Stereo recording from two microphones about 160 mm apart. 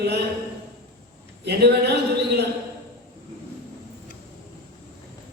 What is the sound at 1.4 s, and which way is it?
A woman's voice, 90° right.